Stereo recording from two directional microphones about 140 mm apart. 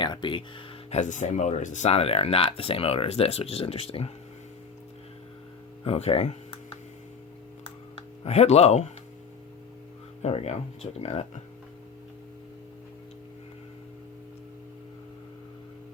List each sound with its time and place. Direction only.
0.0 s speech: 35° left (ahead or behind)
0.9 s speech: 55° left (ahead or behind)
5.8 s speech: 45° left (ahead or behind)
8.2 s speech: 50° left (ahead or behind)
10.2 s speech: 50° left (ahead or behind)